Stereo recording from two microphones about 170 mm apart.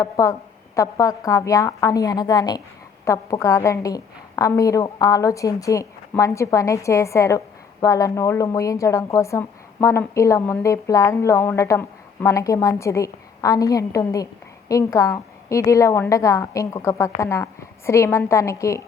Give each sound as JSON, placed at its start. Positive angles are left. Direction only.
{"t": 0.0, "sound": "a woman's voice", "side_deg": 20}